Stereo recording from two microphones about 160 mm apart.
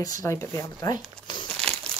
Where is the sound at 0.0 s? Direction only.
20° left (ahead or behind).